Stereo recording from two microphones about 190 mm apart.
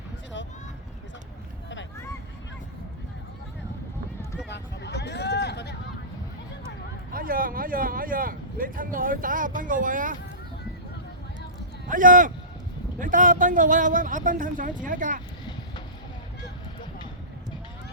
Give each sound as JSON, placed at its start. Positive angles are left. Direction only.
{"t": 4.4, "sound": "a sound", "side_deg": 65}
{"t": 7.1, "sound": "speech", "side_deg": -50}
{"t": 11.9, "sound": "speech", "side_deg": -45}